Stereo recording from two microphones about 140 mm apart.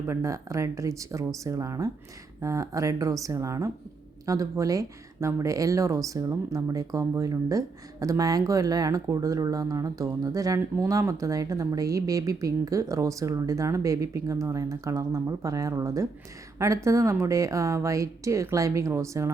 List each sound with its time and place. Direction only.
0.1 s speech: 20° right (ahead or behind)